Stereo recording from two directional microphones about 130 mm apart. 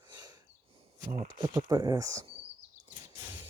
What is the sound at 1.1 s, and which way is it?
Speech, 65° right (ahead or behind).